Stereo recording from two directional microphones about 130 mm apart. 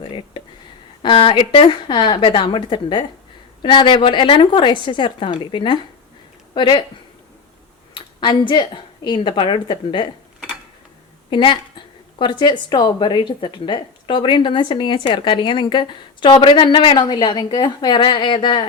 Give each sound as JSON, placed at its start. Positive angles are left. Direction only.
{"t": 0.0, "sound": "a sound", "side_deg": 40}
{"t": 1.0, "sound": "a woman's voice", "side_deg": 40}
{"t": 7.9, "sound": "a woman's voice", "side_deg": 35}
{"t": 11.3, "sound": "a woman's voice", "side_deg": 35}